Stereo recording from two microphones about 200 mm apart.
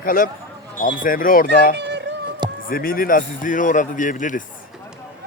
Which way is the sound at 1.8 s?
60° right (ahead or behind).